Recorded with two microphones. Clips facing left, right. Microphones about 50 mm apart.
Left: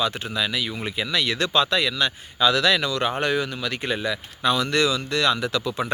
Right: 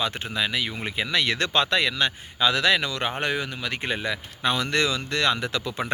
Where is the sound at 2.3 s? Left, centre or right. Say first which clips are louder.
Left 2 dB; right.